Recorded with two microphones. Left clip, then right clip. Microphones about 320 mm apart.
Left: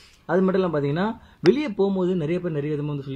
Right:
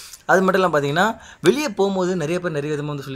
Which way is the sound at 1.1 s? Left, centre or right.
Right.